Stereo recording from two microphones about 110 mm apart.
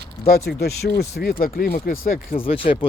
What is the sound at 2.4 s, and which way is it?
Speech, 55° left (ahead or behind).